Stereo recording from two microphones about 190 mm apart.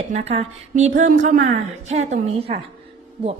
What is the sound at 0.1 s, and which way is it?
A woman's voice, 35° right (ahead or behind).